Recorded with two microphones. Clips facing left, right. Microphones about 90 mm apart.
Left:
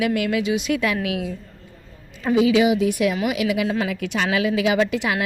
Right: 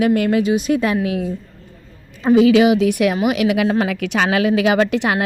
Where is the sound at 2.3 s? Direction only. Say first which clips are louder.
Right 5 dB; 60° right (ahead or behind).